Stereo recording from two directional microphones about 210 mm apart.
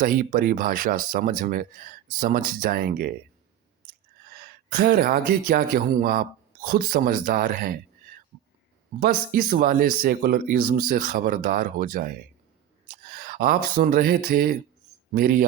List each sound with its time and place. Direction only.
0.0 s speech: 40° right (ahead or behind)
4.4 s speech: 45° right (ahead or behind)
9.0 s speech: 45° right (ahead or behind)
13.1 s speech: 40° right (ahead or behind)